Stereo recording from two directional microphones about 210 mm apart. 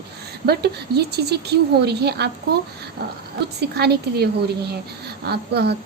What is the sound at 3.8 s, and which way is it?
A woman's voice, 50° right (ahead or behind).